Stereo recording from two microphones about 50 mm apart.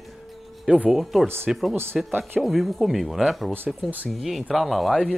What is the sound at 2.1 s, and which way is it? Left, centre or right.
Speech, right.